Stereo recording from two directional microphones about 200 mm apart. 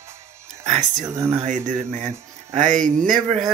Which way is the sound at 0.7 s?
35° right (ahead or behind).